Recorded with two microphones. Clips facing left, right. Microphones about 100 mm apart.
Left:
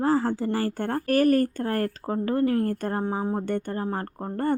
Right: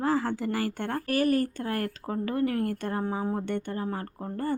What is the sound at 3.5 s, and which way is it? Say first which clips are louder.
Speech: left 3 dB; 45° left (ahead or behind).